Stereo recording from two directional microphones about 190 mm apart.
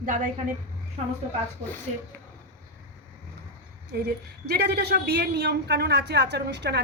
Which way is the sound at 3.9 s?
60° right (ahead or behind).